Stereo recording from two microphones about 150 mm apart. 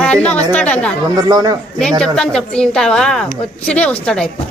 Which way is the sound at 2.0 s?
5° left (ahead or behind).